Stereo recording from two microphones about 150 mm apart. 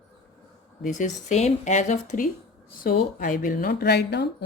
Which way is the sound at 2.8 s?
70° left (ahead or behind).